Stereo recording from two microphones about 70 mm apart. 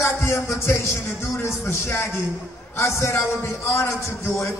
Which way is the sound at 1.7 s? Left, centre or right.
Left.